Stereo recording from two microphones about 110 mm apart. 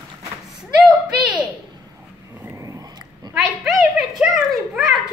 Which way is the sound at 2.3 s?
25° right (ahead or behind).